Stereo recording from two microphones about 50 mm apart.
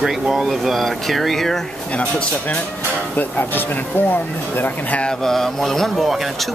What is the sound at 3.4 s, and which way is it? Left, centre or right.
Speech, left.